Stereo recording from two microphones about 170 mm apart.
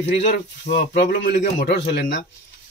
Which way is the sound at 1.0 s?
90° left.